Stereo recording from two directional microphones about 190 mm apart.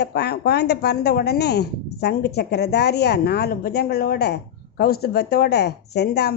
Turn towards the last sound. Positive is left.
turn(degrees=60)  # may be behind; listen again after turning